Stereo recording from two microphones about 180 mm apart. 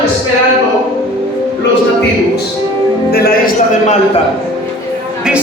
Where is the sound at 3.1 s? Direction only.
55° left (ahead or behind).